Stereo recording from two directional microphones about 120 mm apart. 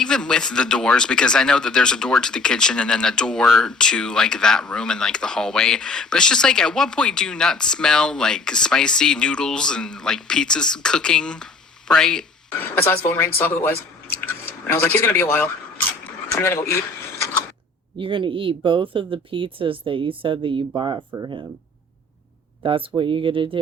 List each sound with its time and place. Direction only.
0.0 s speech: 5° left (ahead or behind)
11.9 s a sound: 5° left (ahead or behind)
12.7 s speech: 20° left (ahead or behind)
17.9 s speech: 45° right (ahead or behind)
22.6 s speech: 50° right (ahead or behind)